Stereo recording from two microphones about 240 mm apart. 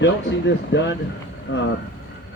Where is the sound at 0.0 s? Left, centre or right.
Left.